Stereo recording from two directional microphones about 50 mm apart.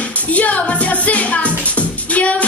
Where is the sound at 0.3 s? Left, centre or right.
Left.